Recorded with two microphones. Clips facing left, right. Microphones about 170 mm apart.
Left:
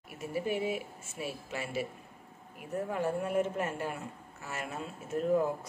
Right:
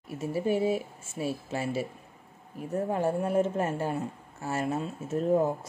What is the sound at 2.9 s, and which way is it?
Speech, 30° right (ahead or behind).